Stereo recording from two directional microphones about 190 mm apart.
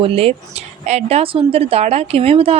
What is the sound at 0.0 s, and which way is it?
Speech, 30° right (ahead or behind).